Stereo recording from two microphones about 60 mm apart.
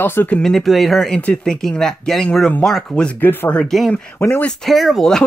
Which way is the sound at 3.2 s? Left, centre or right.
Left.